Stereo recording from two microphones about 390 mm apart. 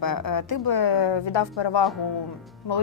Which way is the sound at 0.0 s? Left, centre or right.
Left.